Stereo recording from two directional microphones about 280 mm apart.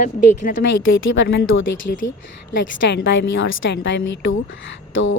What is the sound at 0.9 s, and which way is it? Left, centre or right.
Speech, left.